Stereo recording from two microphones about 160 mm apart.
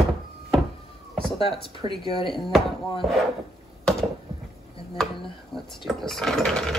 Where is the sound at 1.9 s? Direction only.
35° left (ahead or behind).